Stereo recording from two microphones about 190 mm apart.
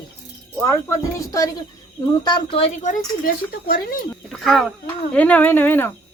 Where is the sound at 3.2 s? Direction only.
50° left (ahead or behind).